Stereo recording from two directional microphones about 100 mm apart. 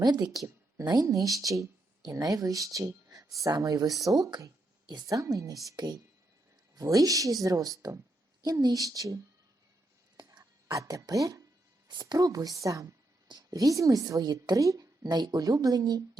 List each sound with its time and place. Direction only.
0.0 s a woman's voice: 40° right (ahead or behind)
10.2 s a sound: 40° right (ahead or behind)
11.9 s a woman's voice: 40° right (ahead or behind)